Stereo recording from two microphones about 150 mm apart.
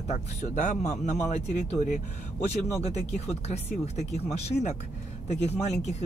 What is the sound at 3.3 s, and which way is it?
Speech, 45° left (ahead or behind).